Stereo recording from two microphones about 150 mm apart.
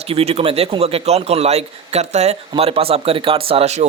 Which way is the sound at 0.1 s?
40° right (ahead or behind).